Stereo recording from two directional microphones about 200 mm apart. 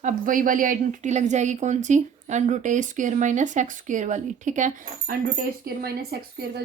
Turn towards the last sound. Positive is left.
turn(degrees=-50)  # may be behind; listen again after turning